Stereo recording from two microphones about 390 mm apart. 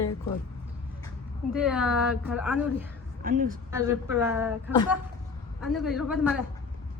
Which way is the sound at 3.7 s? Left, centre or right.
Centre.